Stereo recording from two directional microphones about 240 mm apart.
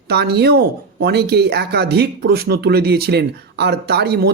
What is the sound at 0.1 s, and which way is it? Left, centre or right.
Speech, right.